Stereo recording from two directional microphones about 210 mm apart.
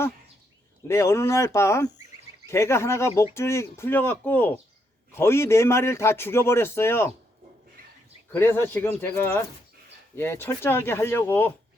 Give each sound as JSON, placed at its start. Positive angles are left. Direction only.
{"t": 0.9, "sound": "a man's voice", "side_deg": 10}
{"t": 8.3, "sound": "a man's voice", "side_deg": 10}